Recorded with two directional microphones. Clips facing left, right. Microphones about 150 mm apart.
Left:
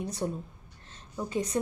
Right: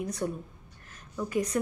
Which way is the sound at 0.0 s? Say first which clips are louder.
Right 1 dB; 30° left (ahead or behind).